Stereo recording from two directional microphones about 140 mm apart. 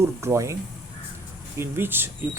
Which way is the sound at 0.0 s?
20° right (ahead or behind).